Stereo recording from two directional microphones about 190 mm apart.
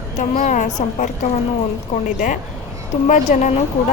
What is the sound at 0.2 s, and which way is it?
A woman's voice, 40° left (ahead or behind).